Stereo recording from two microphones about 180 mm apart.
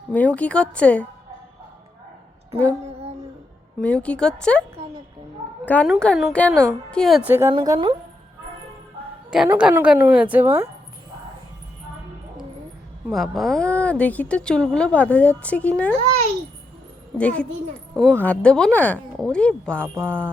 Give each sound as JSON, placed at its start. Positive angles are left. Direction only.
{"t": 0.1, "sound": "speech", "side_deg": 10}
{"t": 3.8, "sound": "speech", "side_deg": 5}
{"t": 5.6, "sound": "speech", "side_deg": 10}
{"t": 7.5, "sound": "a woman's voice", "side_deg": -25}
{"t": 9.5, "sound": "a woman's voice", "side_deg": -10}
{"t": 13.1, "sound": "speech", "side_deg": 0}
{"t": 17.2, "sound": "speech", "side_deg": 5}
{"t": 19.8, "sound": "a woman's voice", "side_deg": -15}
{"t": 20.1, "sound": "speech", "side_deg": 5}